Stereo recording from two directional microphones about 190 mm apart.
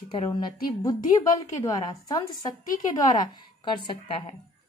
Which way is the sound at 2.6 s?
45° left (ahead or behind).